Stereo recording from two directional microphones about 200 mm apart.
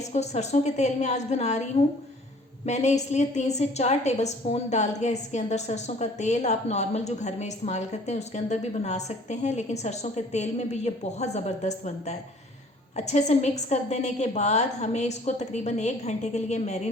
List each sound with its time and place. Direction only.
0.0 s a woman's voice: 35° left (ahead or behind)